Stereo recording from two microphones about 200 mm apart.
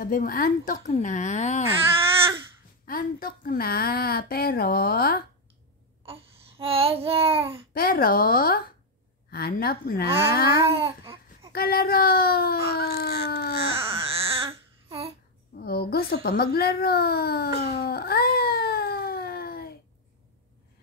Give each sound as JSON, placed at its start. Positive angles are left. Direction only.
{"t": 0.0, "sound": "a woman's voice", "side_deg": 45}
{"t": 2.8, "sound": "a woman's voice", "side_deg": 45}
{"t": 6.6, "sound": "child singing", "side_deg": -30}
{"t": 7.7, "sound": "a woman's voice", "side_deg": 45}
{"t": 10.7, "sound": "a sound", "side_deg": -25}
{"t": 11.5, "sound": "a woman's voice", "side_deg": 50}
{"t": 13.7, "sound": "baby cry", "side_deg": -30}
{"t": 15.6, "sound": "a sound", "side_deg": 50}